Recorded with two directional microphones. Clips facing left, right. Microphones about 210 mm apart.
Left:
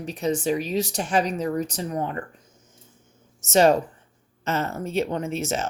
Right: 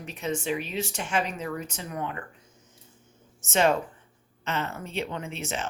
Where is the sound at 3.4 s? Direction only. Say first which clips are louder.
Left 6 dB; 40° left (ahead or behind).